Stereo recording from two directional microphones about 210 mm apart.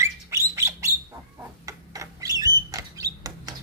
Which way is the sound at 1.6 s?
15° right (ahead or behind).